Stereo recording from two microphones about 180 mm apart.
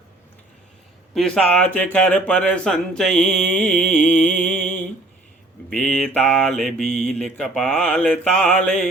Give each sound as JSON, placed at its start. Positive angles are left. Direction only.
{"t": 1.1, "sound": "speech", "side_deg": 5}
{"t": 4.5, "sound": "a sound", "side_deg": 45}
{"t": 5.7, "sound": "speech", "side_deg": 5}
{"t": 6.7, "sound": "mantra", "side_deg": 5}